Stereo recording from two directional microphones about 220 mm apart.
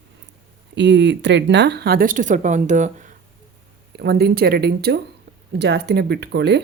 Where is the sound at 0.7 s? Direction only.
55° right (ahead or behind); by 3.1 s 35° right (ahead or behind).